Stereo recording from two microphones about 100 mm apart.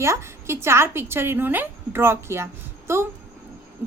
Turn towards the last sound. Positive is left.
turn(degrees=-25)  # may be behind; listen again after turning